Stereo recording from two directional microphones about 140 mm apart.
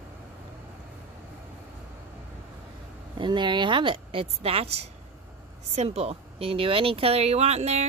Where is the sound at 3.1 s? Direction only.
35° right (ahead or behind); by 7.9 s 50° right (ahead or behind).